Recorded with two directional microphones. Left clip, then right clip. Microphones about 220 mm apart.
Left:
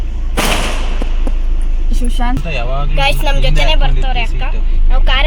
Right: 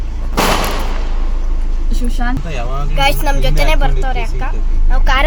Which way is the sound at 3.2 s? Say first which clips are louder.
Left 1 dB; 10° right (ahead or behind).